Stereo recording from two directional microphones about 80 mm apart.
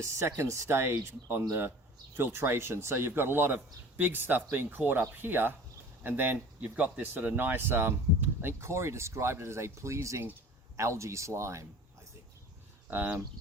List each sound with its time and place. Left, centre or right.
0.0 s speech: right
12.9 s speech: right